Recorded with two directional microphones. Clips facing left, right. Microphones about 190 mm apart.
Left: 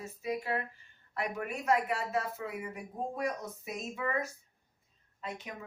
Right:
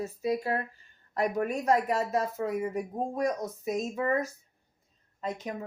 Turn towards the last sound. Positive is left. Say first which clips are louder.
# right 7 dB
turn(degrees=-40)  # may be behind; listen again after turning